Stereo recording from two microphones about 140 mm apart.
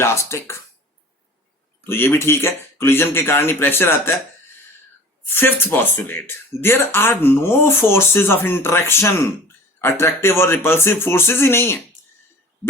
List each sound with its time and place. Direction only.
0.0 s speech: 20° left (ahead or behind)
1.9 s speech: 15° left (ahead or behind)
5.3 s speech: 15° left (ahead or behind)